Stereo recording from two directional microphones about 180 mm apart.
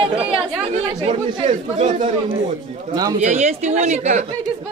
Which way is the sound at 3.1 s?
40° right (ahead or behind).